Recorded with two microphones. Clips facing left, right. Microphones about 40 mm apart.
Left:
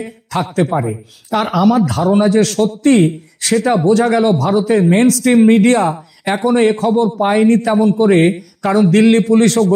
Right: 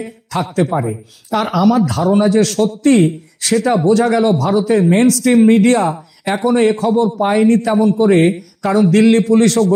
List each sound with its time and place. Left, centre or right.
0.0 s a man's voice: left